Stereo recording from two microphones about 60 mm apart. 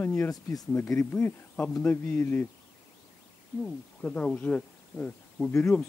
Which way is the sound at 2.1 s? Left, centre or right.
Left.